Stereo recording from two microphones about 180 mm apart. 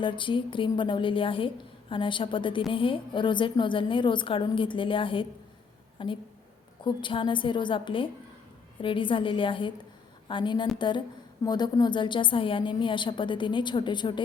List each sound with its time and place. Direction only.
0.0 s a woman's voice: 25° left (ahead or behind)